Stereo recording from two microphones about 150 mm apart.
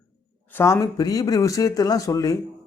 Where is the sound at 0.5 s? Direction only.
20° left (ahead or behind).